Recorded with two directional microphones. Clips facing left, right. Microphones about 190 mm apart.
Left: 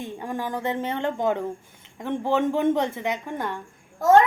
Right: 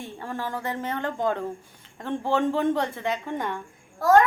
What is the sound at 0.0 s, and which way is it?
A woman's voice, 15° left (ahead or behind).